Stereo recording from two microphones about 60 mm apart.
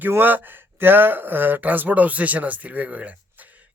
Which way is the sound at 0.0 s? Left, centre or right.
Right.